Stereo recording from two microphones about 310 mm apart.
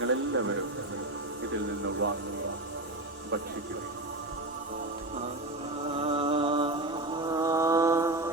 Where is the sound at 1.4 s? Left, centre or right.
Right.